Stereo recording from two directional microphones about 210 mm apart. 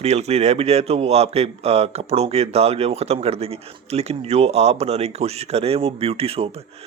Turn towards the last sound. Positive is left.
turn(degrees=-30)  # may be behind; listen again after turning